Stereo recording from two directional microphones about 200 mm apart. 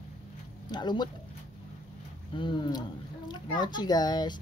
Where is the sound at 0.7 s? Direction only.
20° left (ahead or behind).